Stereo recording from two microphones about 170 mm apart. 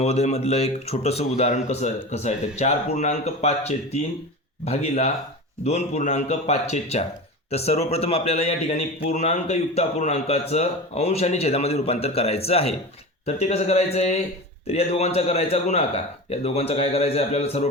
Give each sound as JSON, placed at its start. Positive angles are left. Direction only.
{"t": 0.0, "sound": "a man's voice", "side_deg": 40}